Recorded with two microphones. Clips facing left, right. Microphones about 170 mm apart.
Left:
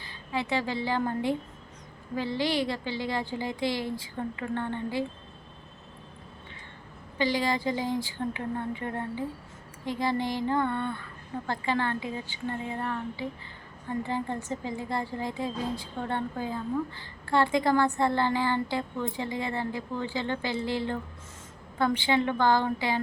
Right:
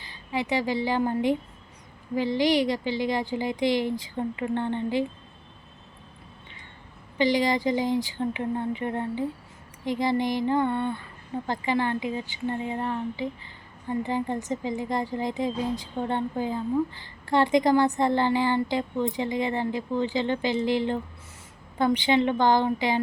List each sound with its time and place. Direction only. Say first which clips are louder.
0.0 s a woman's voice: right 2 dB; 15° right (ahead or behind)
7.2 s a woman's voice: right 4 dB; 15° right (ahead or behind)